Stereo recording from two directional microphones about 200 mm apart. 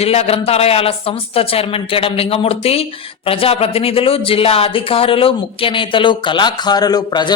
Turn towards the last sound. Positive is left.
turn(degrees=20)  # may be behind; listen again after turning